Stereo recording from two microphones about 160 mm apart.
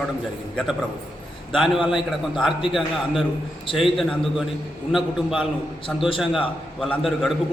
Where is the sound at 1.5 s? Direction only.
Centre (ahead or behind).